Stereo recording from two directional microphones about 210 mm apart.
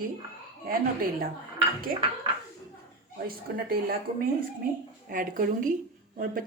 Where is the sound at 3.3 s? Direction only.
45° right (ahead or behind).